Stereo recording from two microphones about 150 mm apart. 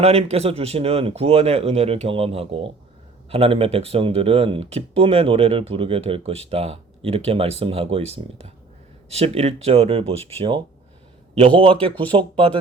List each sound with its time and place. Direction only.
0.0 s speech: 45° right (ahead or behind)